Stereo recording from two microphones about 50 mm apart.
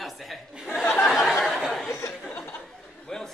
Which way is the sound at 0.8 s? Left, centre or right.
Left.